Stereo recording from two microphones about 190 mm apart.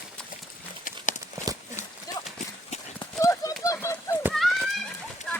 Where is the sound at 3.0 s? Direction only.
20° left (ahead or behind).